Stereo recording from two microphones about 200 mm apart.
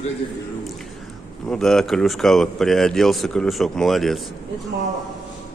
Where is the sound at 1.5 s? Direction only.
Centre (ahead or behind).